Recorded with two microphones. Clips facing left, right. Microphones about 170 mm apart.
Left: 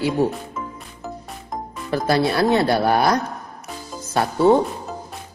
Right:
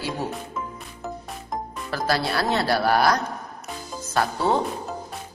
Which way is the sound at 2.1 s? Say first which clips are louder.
Left 6 dB; 20° left (ahead or behind).